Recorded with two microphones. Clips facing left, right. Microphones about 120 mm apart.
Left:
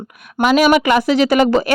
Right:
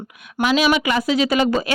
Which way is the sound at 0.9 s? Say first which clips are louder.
Left 5 dB; 65° left (ahead or behind).